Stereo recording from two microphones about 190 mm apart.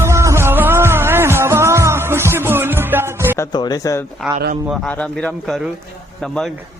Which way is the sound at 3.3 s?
20° left (ahead or behind).